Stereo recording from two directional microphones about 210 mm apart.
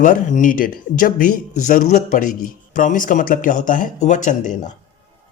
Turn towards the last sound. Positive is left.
turn(degrees=35)  # may be behind; listen again after turning